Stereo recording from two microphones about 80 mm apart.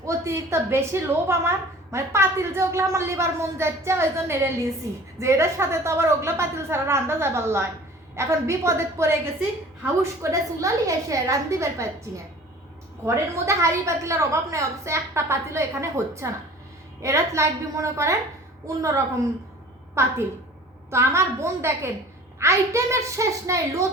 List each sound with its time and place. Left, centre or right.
0.0 s a woman's voice: right
20.0 s a woman's voice: right